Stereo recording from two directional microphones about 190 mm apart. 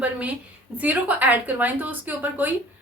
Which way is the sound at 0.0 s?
10° right (ahead or behind).